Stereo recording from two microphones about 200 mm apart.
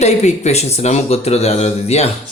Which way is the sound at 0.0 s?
35° left (ahead or behind).